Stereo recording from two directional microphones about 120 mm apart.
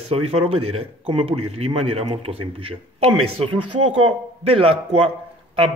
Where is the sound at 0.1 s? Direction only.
55° right (ahead or behind).